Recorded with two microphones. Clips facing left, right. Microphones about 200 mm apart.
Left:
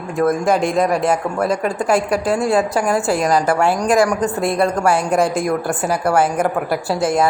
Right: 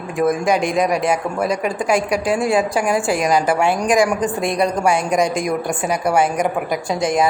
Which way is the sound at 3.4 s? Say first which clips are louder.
Left 1 dB; 15° right (ahead or behind).